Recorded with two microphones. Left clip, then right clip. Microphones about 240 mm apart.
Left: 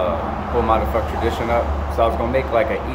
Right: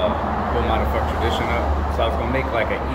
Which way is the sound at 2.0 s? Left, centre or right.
Centre.